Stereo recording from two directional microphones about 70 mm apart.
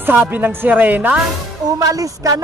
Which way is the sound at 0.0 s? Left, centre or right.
Right.